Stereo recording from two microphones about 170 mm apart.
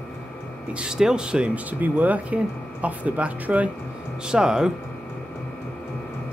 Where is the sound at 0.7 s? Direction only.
5° right (ahead or behind).